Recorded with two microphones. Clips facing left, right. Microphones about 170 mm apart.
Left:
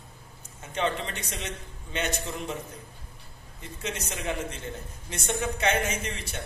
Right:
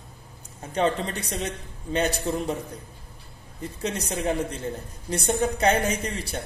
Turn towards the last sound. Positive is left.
turn(degrees=-35)  # may be behind; listen again after turning